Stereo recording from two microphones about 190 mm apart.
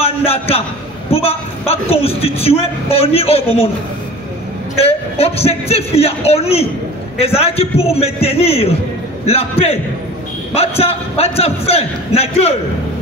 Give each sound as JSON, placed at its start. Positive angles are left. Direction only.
{"t": 0.0, "sound": "a man's voice", "side_deg": 30}
{"t": 1.7, "sound": "a man's voice", "side_deg": 30}
{"t": 4.7, "sound": "a man's voice", "side_deg": 30}